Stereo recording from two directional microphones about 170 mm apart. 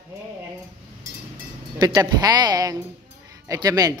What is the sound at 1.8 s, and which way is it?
A man's voice, 20° right (ahead or behind).